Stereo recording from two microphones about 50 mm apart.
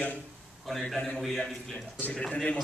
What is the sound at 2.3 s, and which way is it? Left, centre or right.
Speech, left.